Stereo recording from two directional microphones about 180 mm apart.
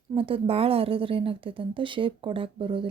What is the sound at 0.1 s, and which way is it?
A woman's voice, 30° right (ahead or behind).